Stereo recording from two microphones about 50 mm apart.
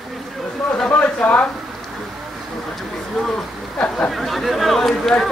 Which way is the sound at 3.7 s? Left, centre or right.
Left.